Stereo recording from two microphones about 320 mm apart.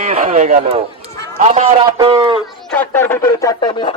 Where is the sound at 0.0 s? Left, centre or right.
Right.